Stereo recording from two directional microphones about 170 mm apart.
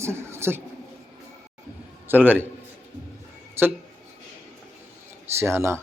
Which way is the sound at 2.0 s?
10° right (ahead or behind).